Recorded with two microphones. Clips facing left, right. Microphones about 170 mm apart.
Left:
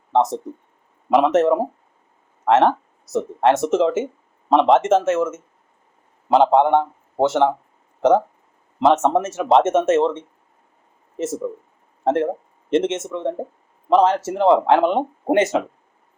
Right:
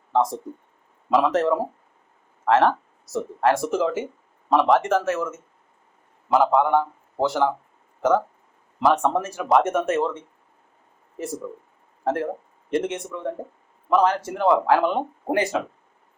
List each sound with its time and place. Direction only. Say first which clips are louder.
0.1 s a man's voice: left 3 dB; 25° left (ahead or behind)
8.8 s speech: left 4 dB; 20° left (ahead or behind)
12.0 s speech: left 5 dB; 25° left (ahead or behind)